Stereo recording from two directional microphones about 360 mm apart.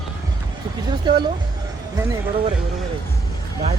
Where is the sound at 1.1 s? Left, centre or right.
Centre.